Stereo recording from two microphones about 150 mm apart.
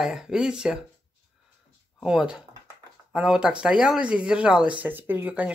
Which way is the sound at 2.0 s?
5° right (ahead or behind).